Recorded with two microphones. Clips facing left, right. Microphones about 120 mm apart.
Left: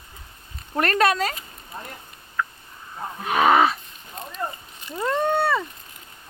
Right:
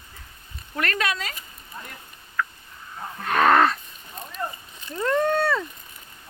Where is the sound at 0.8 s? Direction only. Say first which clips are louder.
Left 7 dB; 40° left (ahead or behind).